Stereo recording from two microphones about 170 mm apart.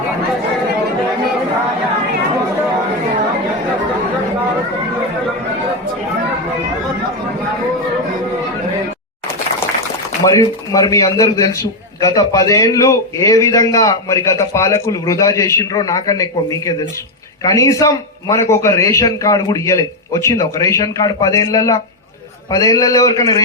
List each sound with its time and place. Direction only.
10.2 s a man's voice: 20° left (ahead or behind)